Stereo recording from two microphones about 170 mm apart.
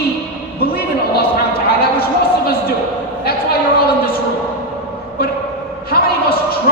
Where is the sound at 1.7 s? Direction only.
65° left (ahead or behind).